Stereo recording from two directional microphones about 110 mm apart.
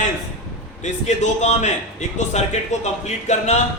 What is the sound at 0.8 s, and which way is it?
A man's voice, 90° left.